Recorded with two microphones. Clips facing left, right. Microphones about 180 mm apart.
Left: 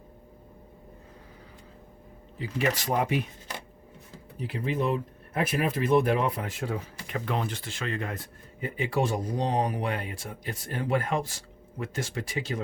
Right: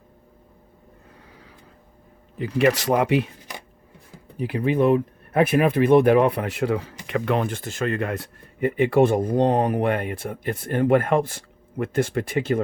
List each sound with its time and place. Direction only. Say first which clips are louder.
2.4 s speech: right 9 dB; 70° right (ahead or behind)
4.4 s speech: right 9 dB; 60° right (ahead or behind); by 7.9 s 45° right (ahead or behind)
7.9 s speech: right 8 dB; 70° right (ahead or behind)